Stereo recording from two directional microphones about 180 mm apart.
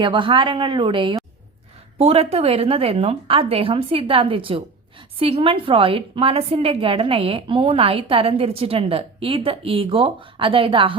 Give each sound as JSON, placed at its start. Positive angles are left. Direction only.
{"t": 0.0, "sound": "a woman's voice", "side_deg": -25}